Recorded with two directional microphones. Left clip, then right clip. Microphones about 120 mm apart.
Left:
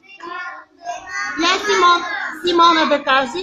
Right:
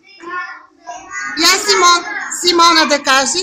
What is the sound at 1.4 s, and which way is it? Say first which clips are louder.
Speech: right 4 dB; 25° right (ahead or behind).